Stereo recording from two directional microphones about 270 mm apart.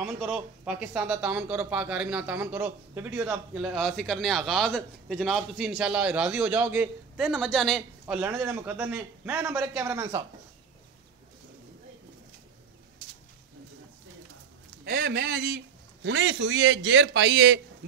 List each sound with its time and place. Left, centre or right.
0.0 s speech: centre
14.9 s a man's voice: right